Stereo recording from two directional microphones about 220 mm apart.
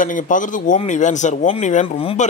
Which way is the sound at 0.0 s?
35° left (ahead or behind).